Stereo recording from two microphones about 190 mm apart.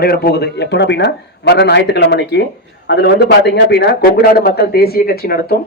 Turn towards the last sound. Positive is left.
turn(degrees=55)  # may be behind; listen again after turning